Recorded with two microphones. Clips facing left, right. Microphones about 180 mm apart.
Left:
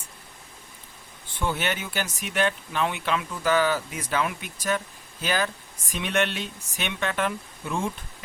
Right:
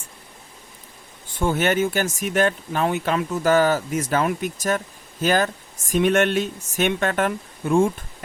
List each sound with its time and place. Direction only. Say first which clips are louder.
1.3 s speech: right 7 dB; 45° right (ahead or behind)